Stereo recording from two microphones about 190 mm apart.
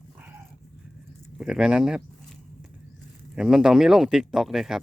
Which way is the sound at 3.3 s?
5° right (ahead or behind).